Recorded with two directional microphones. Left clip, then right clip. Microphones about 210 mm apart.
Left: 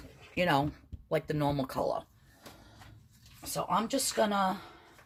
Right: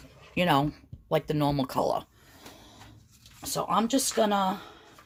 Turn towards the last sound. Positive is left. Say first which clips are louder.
# right 3 dB
turn(degrees=-40)  # may be behind; listen again after turning